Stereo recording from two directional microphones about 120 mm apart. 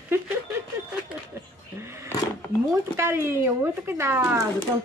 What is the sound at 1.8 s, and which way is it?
Speech, 20° right (ahead or behind).